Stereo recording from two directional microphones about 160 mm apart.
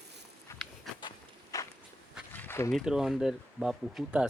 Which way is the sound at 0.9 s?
Centre (ahead or behind).